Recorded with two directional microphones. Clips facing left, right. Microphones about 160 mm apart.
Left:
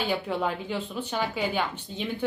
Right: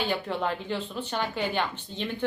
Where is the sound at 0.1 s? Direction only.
10° left (ahead or behind).